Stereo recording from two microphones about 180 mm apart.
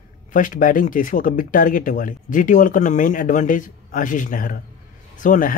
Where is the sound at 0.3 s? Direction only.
50° left (ahead or behind).